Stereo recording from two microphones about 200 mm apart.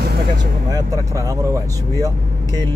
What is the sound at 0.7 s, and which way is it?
Vehicle, 15° right (ahead or behind).